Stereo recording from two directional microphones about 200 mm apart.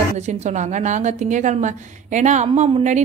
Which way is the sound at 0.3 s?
35° right (ahead or behind).